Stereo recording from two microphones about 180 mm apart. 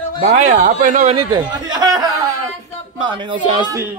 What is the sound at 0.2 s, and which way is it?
Speech, 45° right (ahead or behind).